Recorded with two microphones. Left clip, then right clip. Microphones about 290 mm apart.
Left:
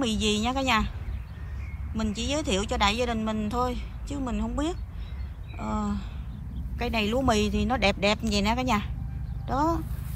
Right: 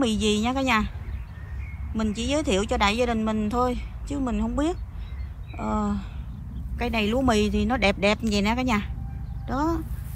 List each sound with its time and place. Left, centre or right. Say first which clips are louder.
0.0 s speech: right 3 dB; centre
2.0 s speech: right 3 dB; centre